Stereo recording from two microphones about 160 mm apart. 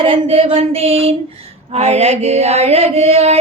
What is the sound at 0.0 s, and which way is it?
Mantra, 35° right (ahead or behind).